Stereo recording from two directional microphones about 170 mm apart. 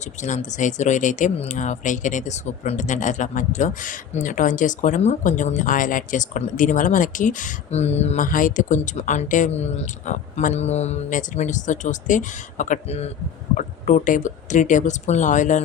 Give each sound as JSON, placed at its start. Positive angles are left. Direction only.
{"t": 0.2, "sound": "speech", "side_deg": 45}